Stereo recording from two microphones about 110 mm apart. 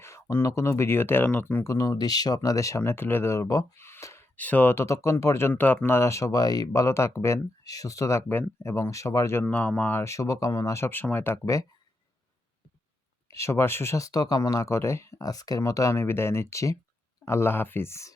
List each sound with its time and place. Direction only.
0.0 s speech: 25° left (ahead or behind)
1.6 s speech: 30° left (ahead or behind)
13.3 s speech: 25° left (ahead or behind)